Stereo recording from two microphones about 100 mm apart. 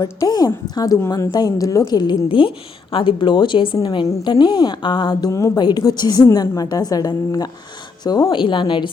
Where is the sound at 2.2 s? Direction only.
60° left (ahead or behind); by 7.4 s 40° left (ahead or behind).